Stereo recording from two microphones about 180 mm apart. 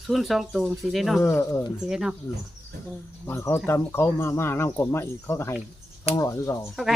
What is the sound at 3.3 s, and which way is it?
Speech, 15° left (ahead or behind).